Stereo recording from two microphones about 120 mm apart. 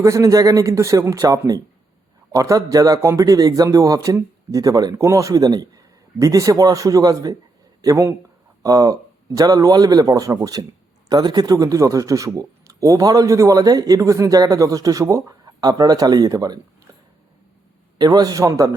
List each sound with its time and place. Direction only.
0.0 s a man's voice: 25° right (ahead or behind)
17.9 s a man's voice: 35° right (ahead or behind)